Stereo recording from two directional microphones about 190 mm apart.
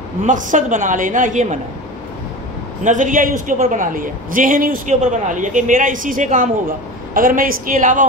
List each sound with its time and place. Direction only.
0.2 s a woman's voice: 40° right (ahead or behind)
2.8 s a woman's voice: 40° right (ahead or behind)